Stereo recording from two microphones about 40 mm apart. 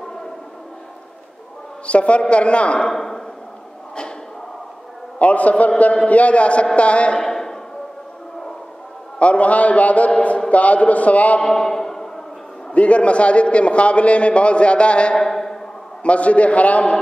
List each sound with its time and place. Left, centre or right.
1.9 s a man's voice: left
2.9 s speech: centre
5.2 s a man's voice: left
7.2 s a sound: centre
9.2 s a man's voice: left
11.4 s a sound: centre
12.7 s a man's voice: left
15.1 s a sound: centre
16.0 s a man's voice: left